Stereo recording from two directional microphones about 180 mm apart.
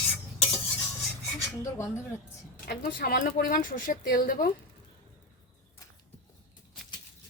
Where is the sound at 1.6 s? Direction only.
15° left (ahead or behind).